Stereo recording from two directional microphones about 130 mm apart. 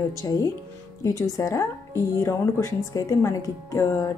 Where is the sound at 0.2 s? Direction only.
25° left (ahead or behind).